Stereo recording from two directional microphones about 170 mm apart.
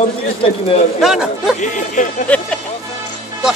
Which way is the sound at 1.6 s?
50° left (ahead or behind).